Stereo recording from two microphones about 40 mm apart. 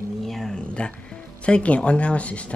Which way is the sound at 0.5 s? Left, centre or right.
Left.